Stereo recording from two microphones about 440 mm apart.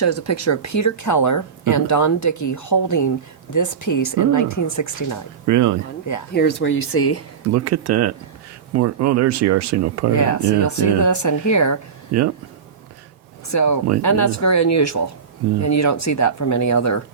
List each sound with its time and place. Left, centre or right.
0.0 s speech: left
5.5 s speech: right
6.3 s speech: left
7.5 s speech: right
10.2 s speech: left
12.1 s speech: right
13.5 s speech: left